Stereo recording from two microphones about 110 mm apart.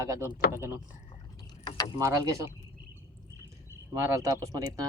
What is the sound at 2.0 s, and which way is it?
Speech, 30° right (ahead or behind).